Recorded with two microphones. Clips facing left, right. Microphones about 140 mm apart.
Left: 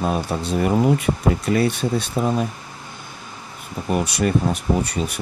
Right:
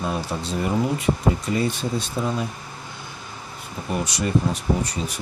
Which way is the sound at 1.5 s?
65° left (ahead or behind).